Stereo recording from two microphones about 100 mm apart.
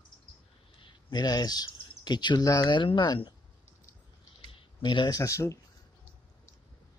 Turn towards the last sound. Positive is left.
turn(degrees=30)  # may be behind; listen again after turning